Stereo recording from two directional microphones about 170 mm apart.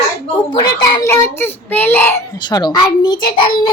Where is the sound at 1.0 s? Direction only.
15° left (ahead or behind).